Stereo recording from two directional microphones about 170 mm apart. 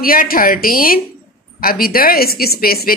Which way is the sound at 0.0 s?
55° left (ahead or behind).